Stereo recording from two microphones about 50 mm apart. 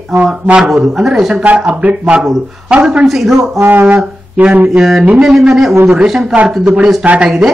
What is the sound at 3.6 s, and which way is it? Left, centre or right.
Speech, right.